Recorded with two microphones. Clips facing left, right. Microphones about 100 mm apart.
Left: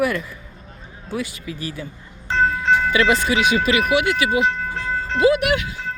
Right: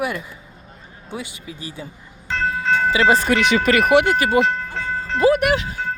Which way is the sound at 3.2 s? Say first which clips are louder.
Right 1 dB; 60° right (ahead or behind).